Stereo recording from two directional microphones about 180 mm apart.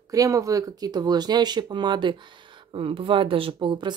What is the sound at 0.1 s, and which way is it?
Speech, 20° right (ahead or behind).